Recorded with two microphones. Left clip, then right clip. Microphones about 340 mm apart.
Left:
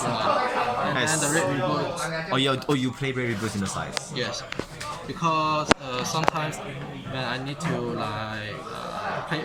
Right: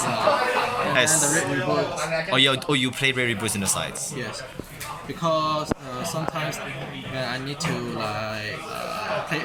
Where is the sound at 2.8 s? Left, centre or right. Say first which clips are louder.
Right 6 dB; right.